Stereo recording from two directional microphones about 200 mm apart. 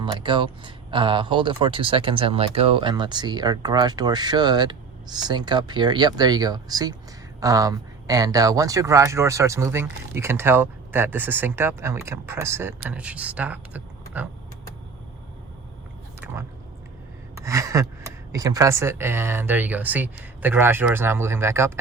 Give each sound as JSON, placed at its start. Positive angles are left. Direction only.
{"t": 0.0, "sound": "speech", "side_deg": -25}
{"t": 16.2, "sound": "chewing", "side_deg": -10}
{"t": 17.4, "sound": "gasp", "side_deg": -15}
{"t": 18.3, "sound": "speech", "side_deg": -15}